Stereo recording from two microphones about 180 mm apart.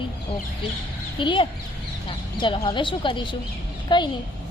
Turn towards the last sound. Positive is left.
turn(degrees=25)  # may be behind; listen again after turning